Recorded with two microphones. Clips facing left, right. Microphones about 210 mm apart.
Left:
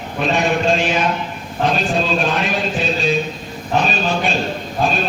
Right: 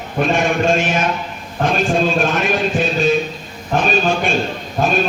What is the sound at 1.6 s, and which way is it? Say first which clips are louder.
Music: right 2 dB; 50° right (ahead or behind).